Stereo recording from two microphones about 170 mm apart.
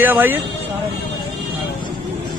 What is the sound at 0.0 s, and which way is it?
Speech, 10° right (ahead or behind).